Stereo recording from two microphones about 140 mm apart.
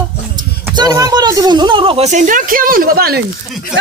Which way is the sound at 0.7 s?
25° right (ahead or behind).